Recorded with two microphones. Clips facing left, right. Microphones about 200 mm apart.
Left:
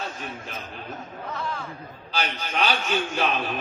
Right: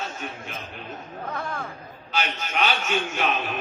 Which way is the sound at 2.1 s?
35° left (ahead or behind).